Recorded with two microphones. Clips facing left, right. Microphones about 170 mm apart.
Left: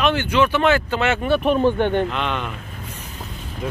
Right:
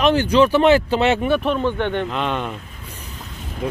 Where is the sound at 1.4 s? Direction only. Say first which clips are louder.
Left 3 dB; 5° left (ahead or behind).